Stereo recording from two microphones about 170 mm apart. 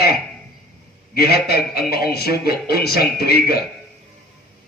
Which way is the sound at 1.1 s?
70° left (ahead or behind).